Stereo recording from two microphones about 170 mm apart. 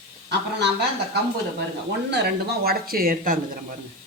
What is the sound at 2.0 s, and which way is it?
A man's voice, 80° right.